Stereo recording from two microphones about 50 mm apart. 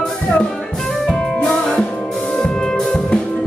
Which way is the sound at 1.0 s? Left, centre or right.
Centre.